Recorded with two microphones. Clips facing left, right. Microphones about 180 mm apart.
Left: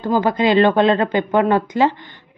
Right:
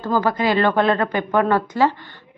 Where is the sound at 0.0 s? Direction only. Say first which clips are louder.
Left 3 dB; 20° left (ahead or behind).